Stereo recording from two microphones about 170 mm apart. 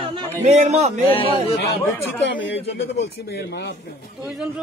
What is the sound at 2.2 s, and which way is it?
Speech, 90° left.